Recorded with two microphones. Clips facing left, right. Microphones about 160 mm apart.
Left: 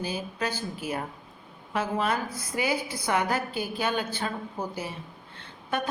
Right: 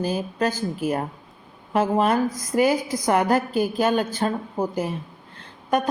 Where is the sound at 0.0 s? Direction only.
45° right (ahead or behind).